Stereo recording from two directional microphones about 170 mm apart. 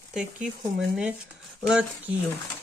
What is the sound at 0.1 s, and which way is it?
Speech, 5° right (ahead or behind).